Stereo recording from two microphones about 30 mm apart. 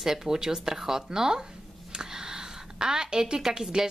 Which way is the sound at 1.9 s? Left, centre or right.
Right.